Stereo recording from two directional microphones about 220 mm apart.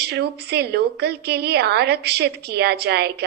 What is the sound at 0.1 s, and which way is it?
A woman's voice, 45° right (ahead or behind).